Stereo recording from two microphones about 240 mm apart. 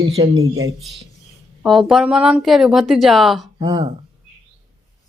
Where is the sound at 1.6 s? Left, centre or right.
Centre.